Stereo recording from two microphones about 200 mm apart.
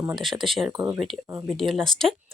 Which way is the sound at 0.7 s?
15° right (ahead or behind).